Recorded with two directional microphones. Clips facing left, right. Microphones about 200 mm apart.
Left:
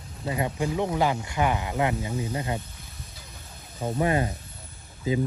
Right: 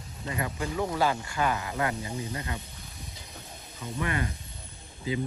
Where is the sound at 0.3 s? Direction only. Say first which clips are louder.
Left 4 dB; 20° left (ahead or behind).